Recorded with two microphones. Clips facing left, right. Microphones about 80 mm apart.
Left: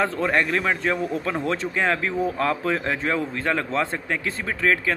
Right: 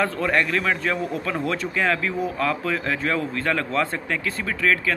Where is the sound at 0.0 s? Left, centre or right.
Left.